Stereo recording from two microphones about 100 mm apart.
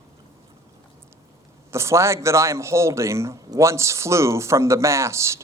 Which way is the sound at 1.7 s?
30° right (ahead or behind).